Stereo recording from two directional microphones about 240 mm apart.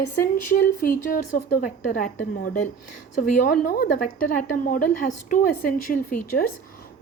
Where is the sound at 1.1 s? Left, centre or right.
Left.